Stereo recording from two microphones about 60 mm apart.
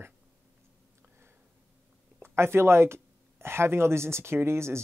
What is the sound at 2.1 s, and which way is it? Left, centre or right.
Speech, right.